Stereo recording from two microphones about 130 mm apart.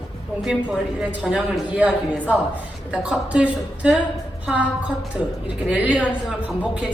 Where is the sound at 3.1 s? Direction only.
10° right (ahead or behind).